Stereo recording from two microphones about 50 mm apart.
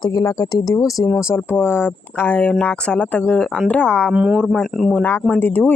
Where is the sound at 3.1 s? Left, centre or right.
Left.